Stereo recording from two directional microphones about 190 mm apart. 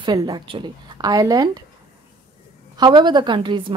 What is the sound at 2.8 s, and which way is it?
Speech, 25° right (ahead or behind).